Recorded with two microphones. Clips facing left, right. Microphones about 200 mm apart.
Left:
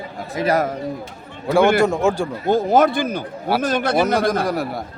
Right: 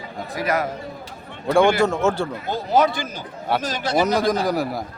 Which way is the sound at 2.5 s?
50° left (ahead or behind).